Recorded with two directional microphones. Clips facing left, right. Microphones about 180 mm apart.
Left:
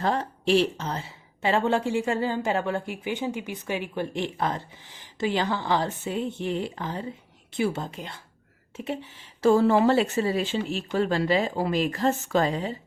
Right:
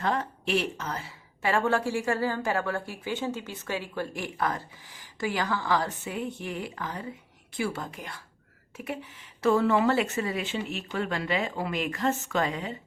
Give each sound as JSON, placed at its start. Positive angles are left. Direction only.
{"t": 0.0, "sound": "a woman's voice", "side_deg": 30}